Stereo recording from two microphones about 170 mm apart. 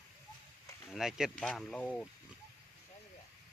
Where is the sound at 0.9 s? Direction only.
Centre (ahead or behind).